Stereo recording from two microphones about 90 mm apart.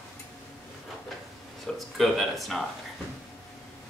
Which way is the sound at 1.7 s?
5° left (ahead or behind).